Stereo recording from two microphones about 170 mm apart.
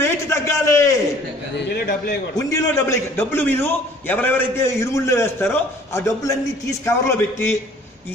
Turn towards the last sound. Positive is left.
turn(degrees=15)  # may be behind; listen again after turning